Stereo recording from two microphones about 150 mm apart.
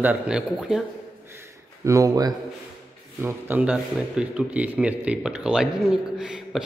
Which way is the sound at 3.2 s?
15° right (ahead or behind).